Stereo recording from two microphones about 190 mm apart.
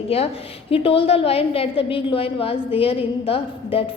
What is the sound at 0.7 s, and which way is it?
A woman's voice, 30° left (ahead or behind).